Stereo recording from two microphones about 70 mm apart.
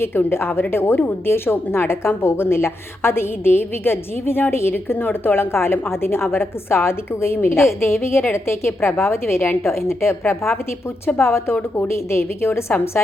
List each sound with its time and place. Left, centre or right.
0.0 s a woman's voice: left